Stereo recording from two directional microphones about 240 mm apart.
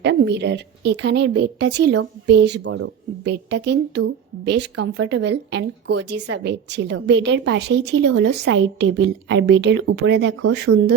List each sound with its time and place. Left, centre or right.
0.0 s a woman's voice: right